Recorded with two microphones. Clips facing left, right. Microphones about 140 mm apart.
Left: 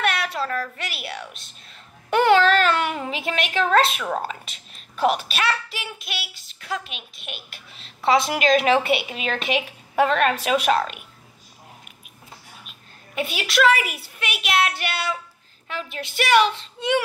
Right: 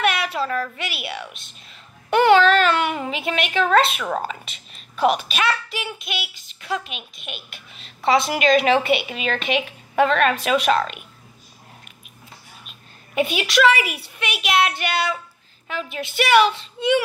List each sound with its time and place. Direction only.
0.0 s a sound: 5° right (ahead or behind)
0.7 s a child's voice: 5° right (ahead or behind)
2.1 s a sound: centre (ahead or behind)
2.9 s a child's voice: 5° right (ahead or behind)
12.6 s a woman's voice: centre (ahead or behind)
15.7 s a child's voice: centre (ahead or behind)